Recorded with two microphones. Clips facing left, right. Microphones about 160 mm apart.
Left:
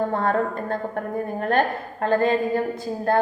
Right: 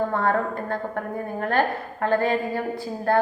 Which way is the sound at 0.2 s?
25° left (ahead or behind).